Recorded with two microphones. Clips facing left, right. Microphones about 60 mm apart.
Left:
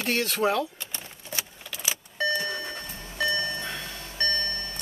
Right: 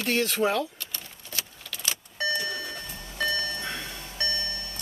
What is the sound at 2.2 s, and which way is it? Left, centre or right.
Doorbell, left.